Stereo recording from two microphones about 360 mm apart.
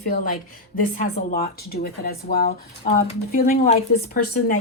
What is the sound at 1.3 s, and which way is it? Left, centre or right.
Speech, left.